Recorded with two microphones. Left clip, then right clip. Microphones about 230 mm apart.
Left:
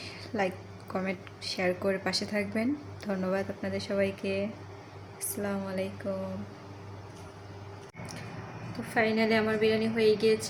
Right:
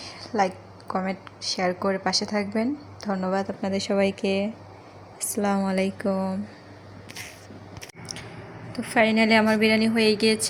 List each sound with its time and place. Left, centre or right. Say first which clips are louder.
0.0 s a sound: right 7 dB; centre
1.5 s a woman's voice: right 4 dB; centre; by 6.1 s right
8.8 s a woman's voice: right 7 dB; right